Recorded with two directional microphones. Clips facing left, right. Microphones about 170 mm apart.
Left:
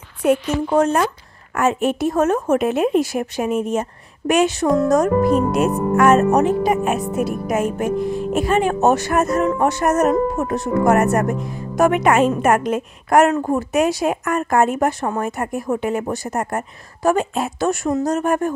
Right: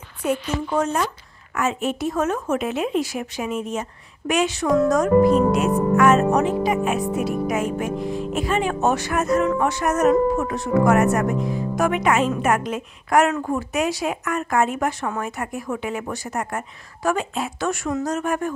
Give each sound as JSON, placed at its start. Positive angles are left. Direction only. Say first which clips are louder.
{"t": 0.7, "sound": "speech", "louder": "left 6 dB", "side_deg": 55}